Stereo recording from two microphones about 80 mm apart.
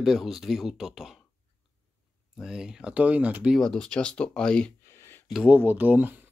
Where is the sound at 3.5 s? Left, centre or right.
Centre.